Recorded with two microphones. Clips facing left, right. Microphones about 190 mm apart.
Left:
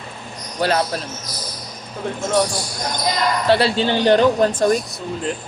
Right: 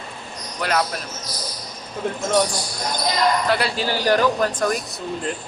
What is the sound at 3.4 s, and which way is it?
Speech, 30° left (ahead or behind).